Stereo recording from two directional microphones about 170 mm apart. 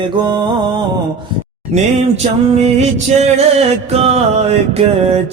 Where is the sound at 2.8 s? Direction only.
40° right (ahead or behind).